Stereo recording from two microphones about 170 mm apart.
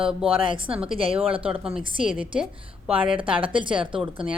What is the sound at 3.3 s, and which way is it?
Speech, 30° right (ahead or behind).